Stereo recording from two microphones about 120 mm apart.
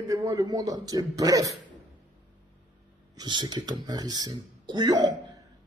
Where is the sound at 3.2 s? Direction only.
35° right (ahead or behind).